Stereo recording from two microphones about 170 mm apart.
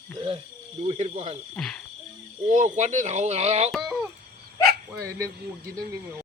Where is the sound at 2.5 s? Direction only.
45° right (ahead or behind).